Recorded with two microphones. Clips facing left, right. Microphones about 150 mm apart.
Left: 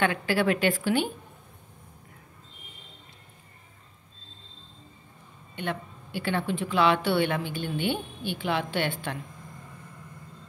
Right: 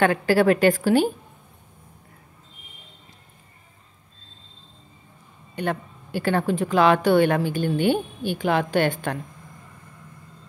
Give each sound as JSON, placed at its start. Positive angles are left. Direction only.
{"t": 0.0, "sound": "a woman's voice", "side_deg": -40}
{"t": 5.6, "sound": "a woman's voice", "side_deg": -45}